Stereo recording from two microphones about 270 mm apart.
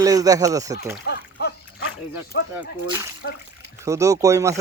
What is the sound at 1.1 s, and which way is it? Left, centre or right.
Splash, left.